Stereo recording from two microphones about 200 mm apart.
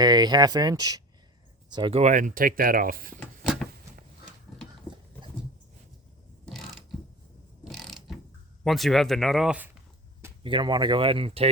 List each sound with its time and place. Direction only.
0.0 s speech: 20° right (ahead or behind); by 3.2 s 45° right (ahead or behind)
6.5 s ratchet: centre (ahead or behind)
7.6 s mechanisms: centre (ahead or behind)
8.6 s speech: centre (ahead or behind)
10.4 s speech: 25° right (ahead or behind)